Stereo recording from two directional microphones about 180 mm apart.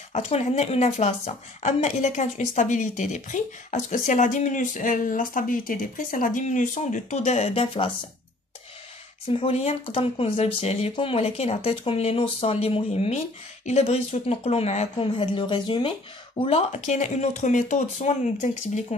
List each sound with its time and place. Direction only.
0.1 s a woman's voice: 40° left (ahead or behind)
9.3 s speech: 35° left (ahead or behind)